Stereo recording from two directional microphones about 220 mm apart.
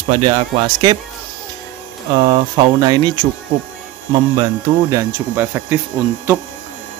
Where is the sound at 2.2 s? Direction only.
20° right (ahead or behind).